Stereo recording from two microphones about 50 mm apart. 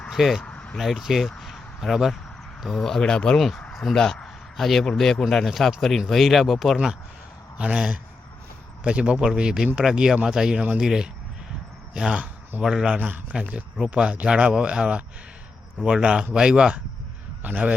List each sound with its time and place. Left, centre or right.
0.1 s speech: centre
0.4 s vehicle: left
0.8 s speech: centre
2.7 s speech: centre
3.7 s a sound: centre
3.9 s a man's voice: centre
7.6 s speech: centre
13.0 s speech: right
13.7 s speech: centre
17.4 s a man's voice: right